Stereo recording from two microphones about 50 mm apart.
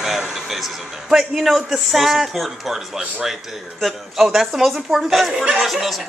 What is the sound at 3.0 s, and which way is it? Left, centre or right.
Speech, centre.